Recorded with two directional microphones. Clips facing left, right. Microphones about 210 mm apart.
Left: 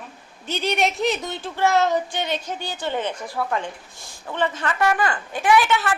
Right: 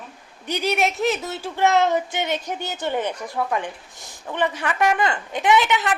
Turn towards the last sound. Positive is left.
turn(degrees=-20)  # may be behind; listen again after turning